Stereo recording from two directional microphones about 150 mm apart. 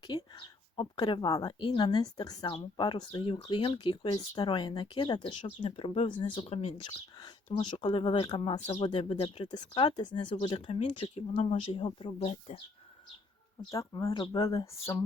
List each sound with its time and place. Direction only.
0.1 s speech: 30° left (ahead or behind)
7.8 s speech: 35° left (ahead or behind)
8.5 s speech: 45° left (ahead or behind)
13.7 s speech: 25° left (ahead or behind)